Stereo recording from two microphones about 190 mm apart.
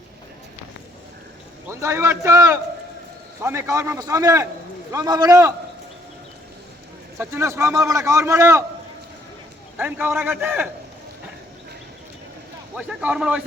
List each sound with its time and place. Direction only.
1.6 s a man's voice: 15° right (ahead or behind)
7.2 s a man's voice: 15° right (ahead or behind)
9.7 s a man's voice: 10° right (ahead or behind)
12.7 s speech: 5° right (ahead or behind)